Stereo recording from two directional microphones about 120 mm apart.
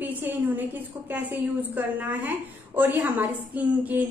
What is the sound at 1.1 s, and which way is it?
A woman's voice, 15° right (ahead or behind).